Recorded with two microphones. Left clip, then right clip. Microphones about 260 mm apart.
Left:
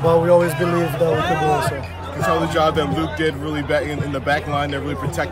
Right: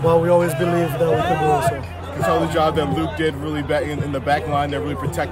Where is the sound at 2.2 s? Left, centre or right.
Right.